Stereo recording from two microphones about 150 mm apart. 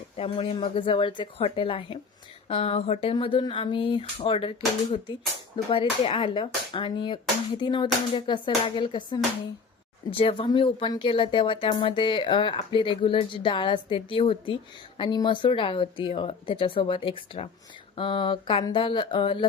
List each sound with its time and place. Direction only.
0.2 s speech: 40° left (ahead or behind)